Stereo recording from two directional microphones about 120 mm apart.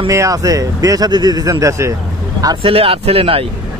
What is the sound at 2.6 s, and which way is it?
Speech, 50° right (ahead or behind).